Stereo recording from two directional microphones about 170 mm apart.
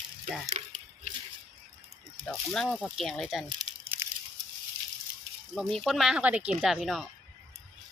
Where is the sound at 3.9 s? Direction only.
10° right (ahead or behind).